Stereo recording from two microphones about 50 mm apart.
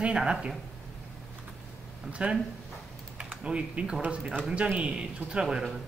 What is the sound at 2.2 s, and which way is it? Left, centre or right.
Speech, right.